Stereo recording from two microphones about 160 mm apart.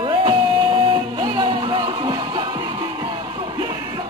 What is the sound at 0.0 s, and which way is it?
Music, 30° right (ahead or behind).